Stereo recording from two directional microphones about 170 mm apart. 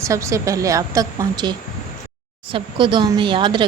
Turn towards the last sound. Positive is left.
turn(degrees=-30)  # may be behind; listen again after turning